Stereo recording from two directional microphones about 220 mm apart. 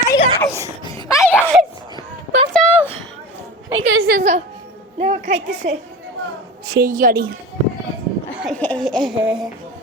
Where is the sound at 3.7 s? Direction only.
65° right (ahead or behind).